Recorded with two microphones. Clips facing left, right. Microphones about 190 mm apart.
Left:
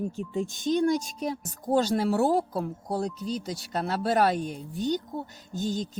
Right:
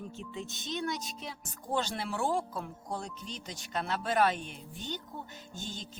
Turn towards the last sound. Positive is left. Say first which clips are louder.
# left 13 dB
turn(degrees=40)  # may be behind; listen again after turning